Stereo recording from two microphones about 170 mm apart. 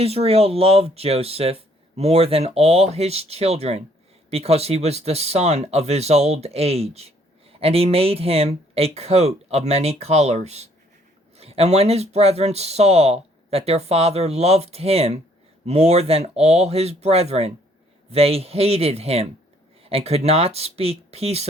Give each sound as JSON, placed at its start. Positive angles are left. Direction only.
{"t": 0.0, "sound": "speech", "side_deg": -35}